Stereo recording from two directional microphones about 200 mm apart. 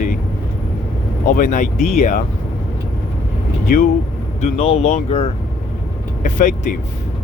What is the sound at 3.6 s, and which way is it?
Speech, 40° left (ahead or behind).